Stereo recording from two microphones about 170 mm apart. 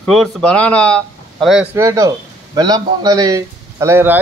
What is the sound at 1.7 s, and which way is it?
Speech, 20° right (ahead or behind).